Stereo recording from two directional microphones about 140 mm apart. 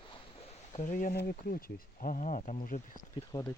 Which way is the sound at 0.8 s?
70° left (ahead or behind).